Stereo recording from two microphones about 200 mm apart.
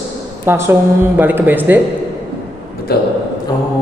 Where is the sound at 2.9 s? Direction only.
50° left (ahead or behind).